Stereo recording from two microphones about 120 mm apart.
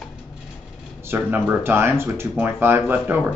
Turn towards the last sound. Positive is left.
turn(degrees=-15)  # may be behind; listen again after turning